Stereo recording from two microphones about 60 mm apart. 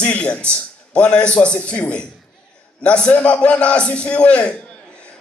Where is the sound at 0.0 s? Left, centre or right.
Left.